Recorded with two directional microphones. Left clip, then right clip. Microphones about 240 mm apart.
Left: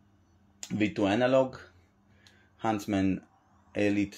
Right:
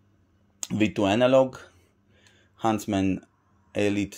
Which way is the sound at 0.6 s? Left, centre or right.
Right.